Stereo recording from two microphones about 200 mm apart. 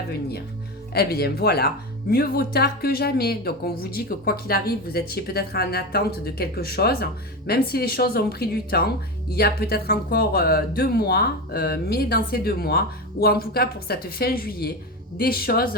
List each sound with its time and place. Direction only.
0.9 s speech: 50° left (ahead or behind)